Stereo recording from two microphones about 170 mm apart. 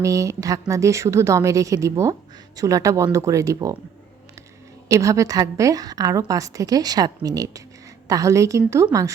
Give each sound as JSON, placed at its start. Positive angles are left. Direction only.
{"t": 0.0, "sound": "a woman's voice", "side_deg": -20}
{"t": 4.9, "sound": "a woman's voice", "side_deg": -20}